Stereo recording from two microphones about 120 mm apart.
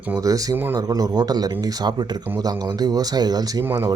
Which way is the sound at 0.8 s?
30° right (ahead or behind).